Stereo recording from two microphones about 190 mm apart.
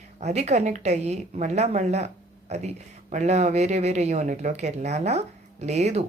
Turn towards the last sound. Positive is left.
turn(degrees=-35)  # may be behind; listen again after turning